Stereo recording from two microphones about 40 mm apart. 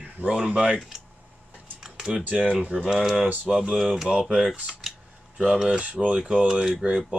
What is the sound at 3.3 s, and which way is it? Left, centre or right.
Speech, right.